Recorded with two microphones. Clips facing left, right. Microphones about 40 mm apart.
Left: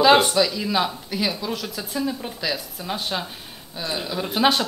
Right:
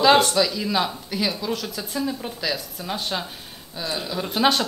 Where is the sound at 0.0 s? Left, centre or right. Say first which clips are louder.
Left 1 dB; centre.